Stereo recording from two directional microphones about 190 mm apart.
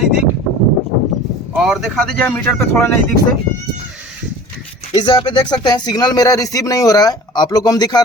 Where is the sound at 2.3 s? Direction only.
10° left (ahead or behind).